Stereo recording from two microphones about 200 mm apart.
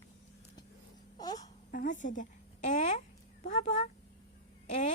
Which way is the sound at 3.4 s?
40° left (ahead or behind).